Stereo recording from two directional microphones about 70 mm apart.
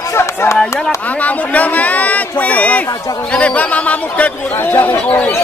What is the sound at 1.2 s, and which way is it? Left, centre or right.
Speech, left.